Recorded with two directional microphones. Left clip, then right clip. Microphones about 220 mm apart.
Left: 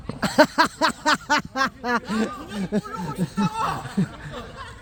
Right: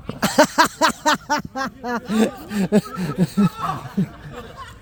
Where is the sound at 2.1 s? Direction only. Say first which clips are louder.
Right 6 dB; 30° right (ahead or behind).